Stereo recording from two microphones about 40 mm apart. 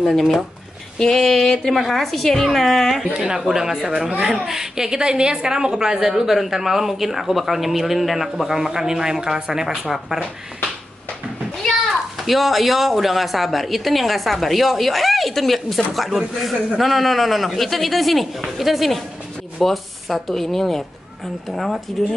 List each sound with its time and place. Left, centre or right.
0.9 s a sound: centre
1.9 s speech: centre
3.1 s a woman's voice: right
3.3 s a woman's voice: centre
11.5 s speech: centre